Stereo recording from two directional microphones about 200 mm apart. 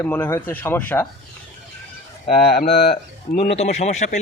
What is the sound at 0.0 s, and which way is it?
Speech, 10° left (ahead or behind).